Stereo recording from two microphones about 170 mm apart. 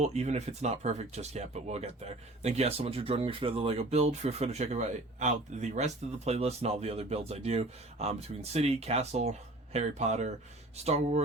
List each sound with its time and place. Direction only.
0.0 s speech: 40° right (ahead or behind)